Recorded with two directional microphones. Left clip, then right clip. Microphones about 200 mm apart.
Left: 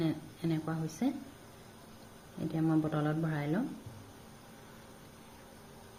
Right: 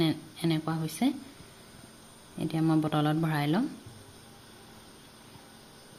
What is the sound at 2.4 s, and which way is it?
Speech, 45° right (ahead or behind).